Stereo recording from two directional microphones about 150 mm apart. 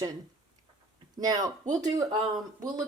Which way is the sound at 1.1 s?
25° right (ahead or behind).